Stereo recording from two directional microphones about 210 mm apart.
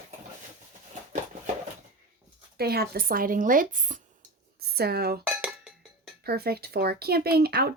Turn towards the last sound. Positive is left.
turn(degrees=-50)  # may be behind; listen again after turning